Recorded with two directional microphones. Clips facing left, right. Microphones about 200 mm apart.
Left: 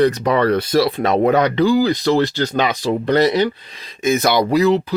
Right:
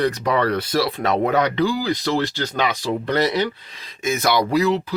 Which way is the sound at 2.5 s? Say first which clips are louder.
Left 2 dB; 20° left (ahead or behind).